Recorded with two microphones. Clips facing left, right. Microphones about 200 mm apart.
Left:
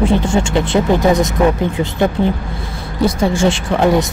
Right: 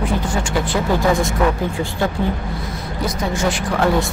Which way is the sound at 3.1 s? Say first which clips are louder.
Left 5 dB; 30° left (ahead or behind).